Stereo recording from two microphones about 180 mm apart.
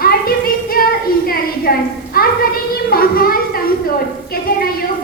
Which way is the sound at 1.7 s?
55° left (ahead or behind).